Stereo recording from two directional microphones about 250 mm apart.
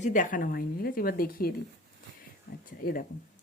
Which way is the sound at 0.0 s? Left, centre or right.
Left.